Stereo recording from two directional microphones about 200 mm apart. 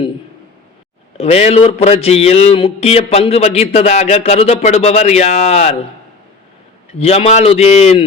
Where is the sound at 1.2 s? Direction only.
30° left (ahead or behind).